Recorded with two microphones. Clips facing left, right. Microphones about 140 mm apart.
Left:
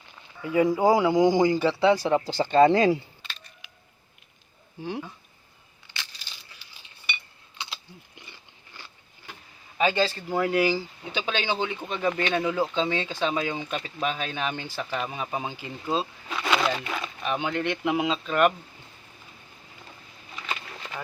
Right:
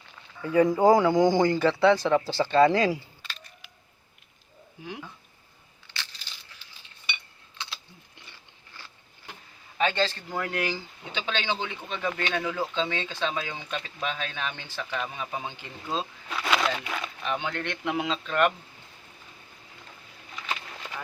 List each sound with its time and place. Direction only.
0.4 s speech: 10° left (ahead or behind)
4.8 s speech: 30° left (ahead or behind)
6.6 s cutlery: 10° left (ahead or behind)
9.7 s speech: 10° left (ahead or behind)
15.4 s speech: 5° left (ahead or behind)
20.3 s a sound: centre (ahead or behind)